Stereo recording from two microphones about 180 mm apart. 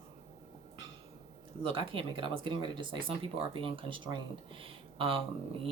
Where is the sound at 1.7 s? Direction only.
30° right (ahead or behind).